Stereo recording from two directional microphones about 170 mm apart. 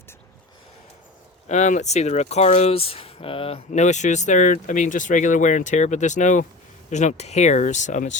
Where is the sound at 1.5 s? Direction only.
45° left (ahead or behind).